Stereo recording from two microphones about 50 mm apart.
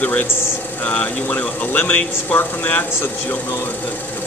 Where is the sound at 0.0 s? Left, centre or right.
Left.